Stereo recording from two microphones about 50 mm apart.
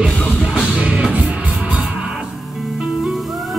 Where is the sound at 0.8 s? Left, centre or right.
Right.